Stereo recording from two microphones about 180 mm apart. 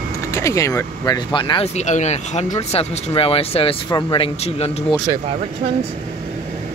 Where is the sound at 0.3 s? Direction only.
15° left (ahead or behind); by 4.8 s 35° left (ahead or behind).